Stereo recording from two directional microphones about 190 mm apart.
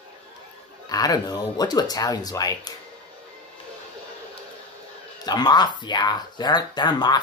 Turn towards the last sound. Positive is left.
turn(degrees=20)  # may be behind; listen again after turning